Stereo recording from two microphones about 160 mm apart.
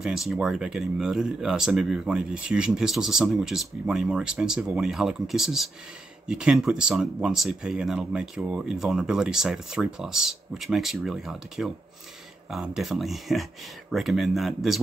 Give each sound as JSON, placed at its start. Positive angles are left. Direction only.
{"t": 0.0, "sound": "speech", "side_deg": 0}